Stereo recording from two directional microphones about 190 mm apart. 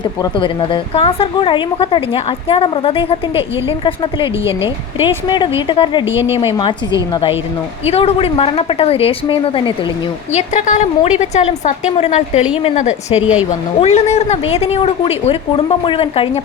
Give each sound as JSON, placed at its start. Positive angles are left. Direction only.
{"t": 0.0, "sound": "a woman's voice", "side_deg": 25}
{"t": 6.1, "sound": "speech", "side_deg": -15}
{"t": 6.5, "sound": "a woman's voice", "side_deg": 25}
{"t": 10.3, "sound": "a woman's voice", "side_deg": 40}
{"t": 13.1, "sound": "speech", "side_deg": -5}
{"t": 13.8, "sound": "a woman's voice", "side_deg": 35}